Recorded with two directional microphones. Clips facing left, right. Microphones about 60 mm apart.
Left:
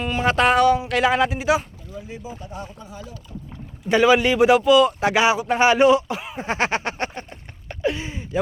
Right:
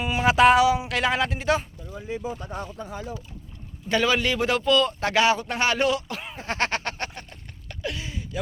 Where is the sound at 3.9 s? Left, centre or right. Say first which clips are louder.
Left 7 dB; centre.